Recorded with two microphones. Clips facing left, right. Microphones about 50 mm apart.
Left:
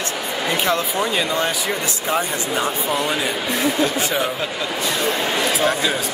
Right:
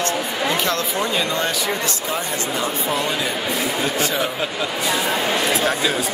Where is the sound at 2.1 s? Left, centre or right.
Left.